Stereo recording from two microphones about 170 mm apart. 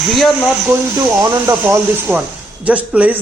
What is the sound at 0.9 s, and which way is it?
A man's voice, 20° right (ahead or behind).